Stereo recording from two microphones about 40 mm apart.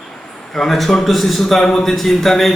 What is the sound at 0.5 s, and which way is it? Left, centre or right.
A man's voice, centre.